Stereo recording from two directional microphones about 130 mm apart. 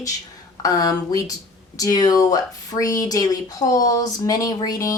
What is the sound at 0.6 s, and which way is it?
Speech, 30° left (ahead or behind).